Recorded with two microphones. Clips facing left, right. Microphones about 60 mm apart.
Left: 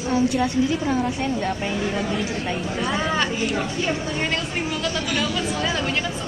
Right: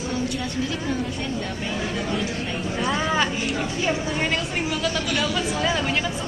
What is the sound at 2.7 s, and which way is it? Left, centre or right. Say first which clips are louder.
A woman's voice: right 1 dB; centre.